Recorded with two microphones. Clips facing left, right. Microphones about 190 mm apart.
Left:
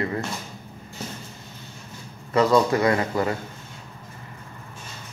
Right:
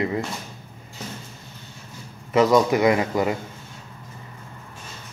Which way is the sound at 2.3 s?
15° right (ahead or behind).